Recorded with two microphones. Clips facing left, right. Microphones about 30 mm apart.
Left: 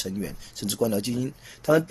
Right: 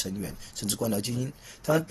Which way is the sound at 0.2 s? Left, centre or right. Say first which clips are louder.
Left 3 dB; centre.